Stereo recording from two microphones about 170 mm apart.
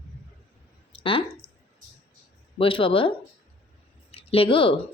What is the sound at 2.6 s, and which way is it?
Speech, 30° left (ahead or behind).